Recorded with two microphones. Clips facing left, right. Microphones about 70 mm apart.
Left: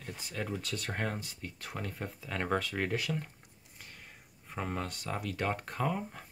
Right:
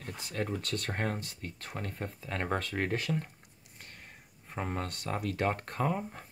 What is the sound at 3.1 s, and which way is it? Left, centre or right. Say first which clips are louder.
Speech: right 3 dB; centre.